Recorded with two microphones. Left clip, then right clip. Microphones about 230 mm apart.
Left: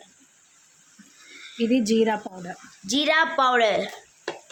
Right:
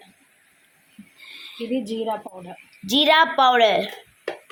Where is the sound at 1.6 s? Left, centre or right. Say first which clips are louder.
Left 6 dB; left.